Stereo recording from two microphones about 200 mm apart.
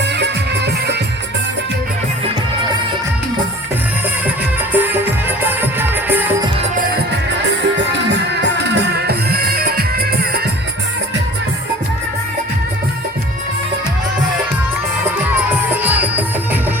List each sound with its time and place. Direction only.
0.0 s music: 60° right (ahead or behind)
4.8 s music: 10° right (ahead or behind)
8.1 s music: 60° right (ahead or behind)
15.8 s music: 10° right (ahead or behind)